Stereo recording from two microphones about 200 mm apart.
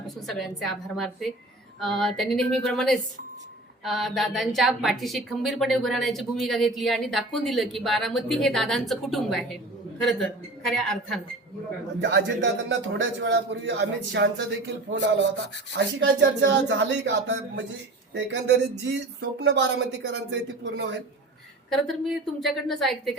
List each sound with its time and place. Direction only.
0.3 s a woman's voice: centre (ahead or behind)
11.9 s a man's voice: 65° right (ahead or behind)
21.7 s a woman's voice: centre (ahead or behind)